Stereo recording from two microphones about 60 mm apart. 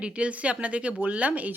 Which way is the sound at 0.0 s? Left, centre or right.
Centre.